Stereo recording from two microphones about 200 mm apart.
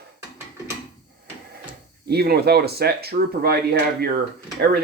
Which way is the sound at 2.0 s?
50° right (ahead or behind).